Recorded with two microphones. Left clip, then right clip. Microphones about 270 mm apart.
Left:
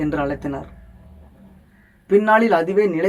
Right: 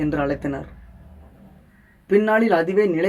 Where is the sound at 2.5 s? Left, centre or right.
Centre.